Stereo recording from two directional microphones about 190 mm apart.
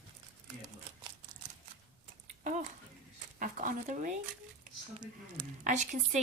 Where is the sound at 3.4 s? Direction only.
45° right (ahead or behind).